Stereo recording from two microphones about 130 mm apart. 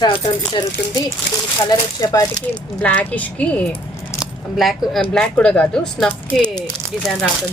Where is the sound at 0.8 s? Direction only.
10° left (ahead or behind).